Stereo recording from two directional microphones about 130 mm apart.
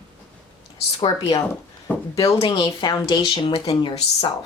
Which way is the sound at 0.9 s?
35° left (ahead or behind).